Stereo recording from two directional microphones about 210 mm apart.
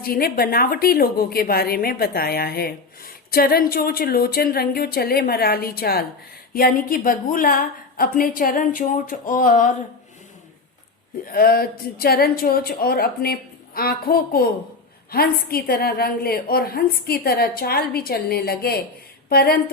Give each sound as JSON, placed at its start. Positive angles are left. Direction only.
{"t": 0.0, "sound": "a woman's voice", "side_deg": 45}
{"t": 11.3, "sound": "a woman's voice", "side_deg": 45}